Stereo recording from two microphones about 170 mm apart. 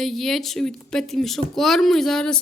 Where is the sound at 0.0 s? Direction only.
Centre (ahead or behind).